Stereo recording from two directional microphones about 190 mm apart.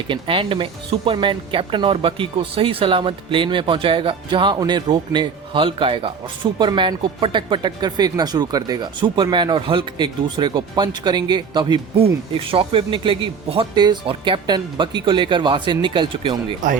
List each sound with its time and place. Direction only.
0.1 s speech: 30° right (ahead or behind)